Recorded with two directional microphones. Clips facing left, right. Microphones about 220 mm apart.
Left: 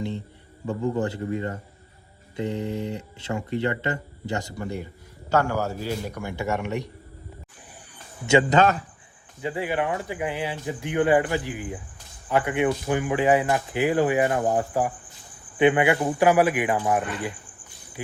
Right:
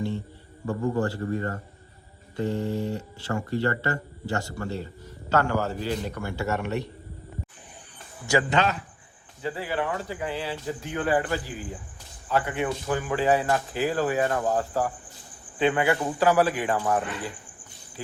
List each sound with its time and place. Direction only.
0.7 s speech: 20° left (ahead or behind)
8.4 s a man's voice: 45° left (ahead or behind)
9.4 s speech: 20° left (ahead or behind)